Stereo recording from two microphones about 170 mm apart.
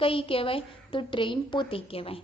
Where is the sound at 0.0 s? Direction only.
30° left (ahead or behind).